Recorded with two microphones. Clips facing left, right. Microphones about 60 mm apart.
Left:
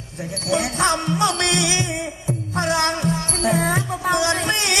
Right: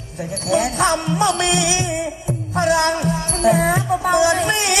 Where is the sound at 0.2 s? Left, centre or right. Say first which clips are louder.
Right 3 dB; right.